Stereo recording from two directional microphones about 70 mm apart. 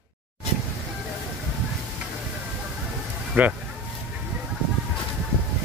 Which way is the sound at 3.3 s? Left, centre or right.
Right.